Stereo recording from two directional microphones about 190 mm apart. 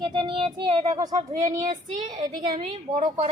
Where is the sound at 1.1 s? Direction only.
40° right (ahead or behind).